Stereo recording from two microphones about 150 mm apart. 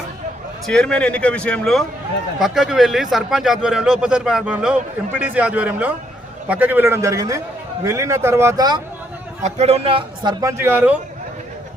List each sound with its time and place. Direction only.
0.7 s a man's voice: 5° left (ahead or behind); by 8.8 s 25° right (ahead or behind)
9.4 s a man's voice: 45° right (ahead or behind)
10.4 s a man's voice: 15° right (ahead or behind)